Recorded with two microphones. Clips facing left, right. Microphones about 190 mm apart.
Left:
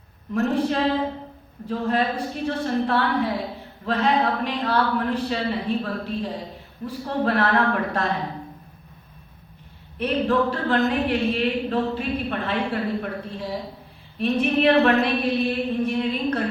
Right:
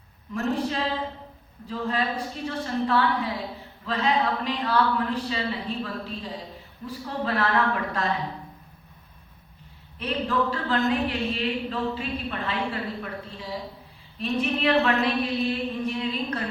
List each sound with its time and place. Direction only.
0.5 s speech: 55° left (ahead or behind)
10.0 s speech: 60° left (ahead or behind)